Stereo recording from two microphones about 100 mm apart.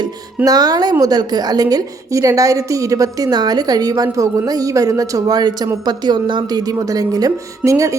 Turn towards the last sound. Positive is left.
turn(degrees=-30)  # may be behind; listen again after turning